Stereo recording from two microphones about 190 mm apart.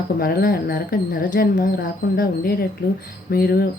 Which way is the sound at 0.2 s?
50° left (ahead or behind).